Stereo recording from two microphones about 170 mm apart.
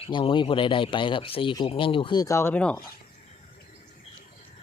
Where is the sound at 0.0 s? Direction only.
30° left (ahead or behind); by 2.8 s 10° left (ahead or behind).